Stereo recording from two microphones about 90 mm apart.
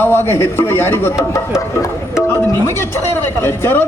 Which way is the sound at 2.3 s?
30° left (ahead or behind).